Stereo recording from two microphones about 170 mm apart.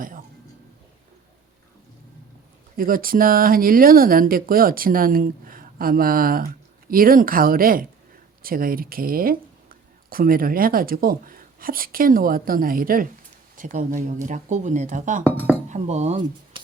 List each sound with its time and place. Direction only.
2.7 s speech: 55° right (ahead or behind)